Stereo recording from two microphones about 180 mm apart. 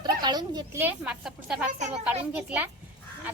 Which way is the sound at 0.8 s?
10° right (ahead or behind).